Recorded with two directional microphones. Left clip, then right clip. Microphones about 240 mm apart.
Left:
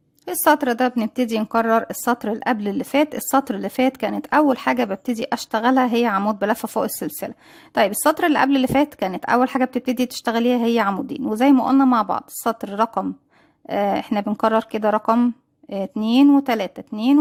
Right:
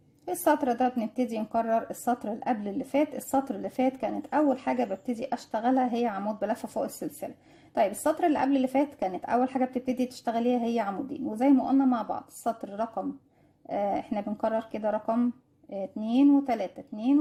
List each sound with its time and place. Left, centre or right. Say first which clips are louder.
0.3 s a woman's voice: left 8 dB; left